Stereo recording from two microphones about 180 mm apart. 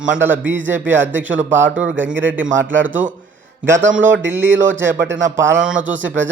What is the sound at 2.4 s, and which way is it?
Speech, 90° right.